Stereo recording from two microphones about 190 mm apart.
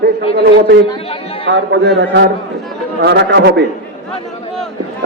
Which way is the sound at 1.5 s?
65° right (ahead or behind).